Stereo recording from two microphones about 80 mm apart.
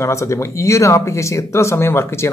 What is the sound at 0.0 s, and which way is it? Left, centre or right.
Speech, left.